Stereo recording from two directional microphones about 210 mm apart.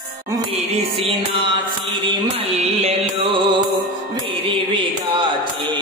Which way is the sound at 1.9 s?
25° right (ahead or behind).